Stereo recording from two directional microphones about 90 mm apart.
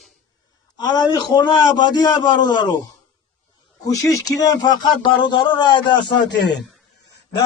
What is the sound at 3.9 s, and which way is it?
A man's voice, 35° left (ahead or behind).